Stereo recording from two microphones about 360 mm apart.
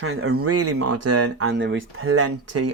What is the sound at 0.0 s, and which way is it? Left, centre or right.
Speech, right.